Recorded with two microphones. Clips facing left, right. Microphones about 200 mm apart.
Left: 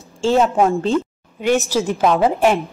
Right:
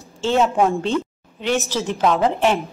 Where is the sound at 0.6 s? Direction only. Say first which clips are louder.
Left 2 dB; centre (ahead or behind).